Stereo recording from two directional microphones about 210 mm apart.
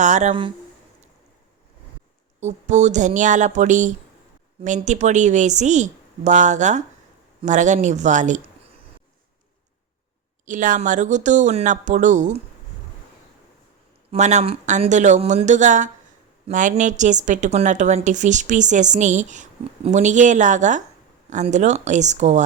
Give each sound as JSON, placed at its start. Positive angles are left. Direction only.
{"t": 0.0, "sound": "a woman's voice", "side_deg": -35}
{"t": 2.4, "sound": "a woman's voice", "side_deg": -35}
{"t": 10.4, "sound": "a woman's voice", "side_deg": -35}
{"t": 14.1, "sound": "a woman's voice", "side_deg": -35}